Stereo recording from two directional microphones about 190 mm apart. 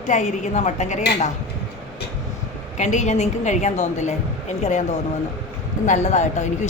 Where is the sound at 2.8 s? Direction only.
40° left (ahead or behind).